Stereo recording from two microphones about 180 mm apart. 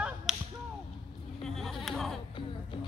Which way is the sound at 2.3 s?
30° left (ahead or behind).